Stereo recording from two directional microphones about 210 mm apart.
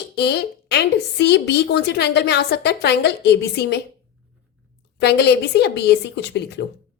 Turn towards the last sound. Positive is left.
turn(degrees=55)  # may be behind; listen again after turning